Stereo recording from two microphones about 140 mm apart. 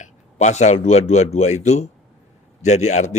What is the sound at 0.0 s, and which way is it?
A man's voice, 55° left (ahead or behind).